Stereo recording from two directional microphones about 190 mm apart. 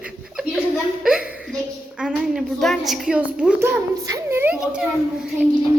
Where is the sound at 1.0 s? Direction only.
5° right (ahead or behind).